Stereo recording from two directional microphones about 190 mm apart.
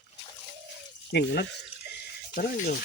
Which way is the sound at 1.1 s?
60° left (ahead or behind).